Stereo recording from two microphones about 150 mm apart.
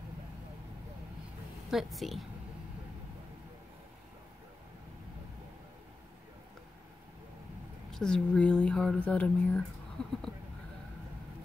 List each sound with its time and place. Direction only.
1.7 s a woman's voice: centre (ahead or behind)
7.9 s a woman's voice: 5° left (ahead or behind)